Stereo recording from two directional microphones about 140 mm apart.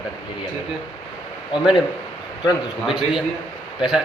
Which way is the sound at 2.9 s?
Centre (ahead or behind).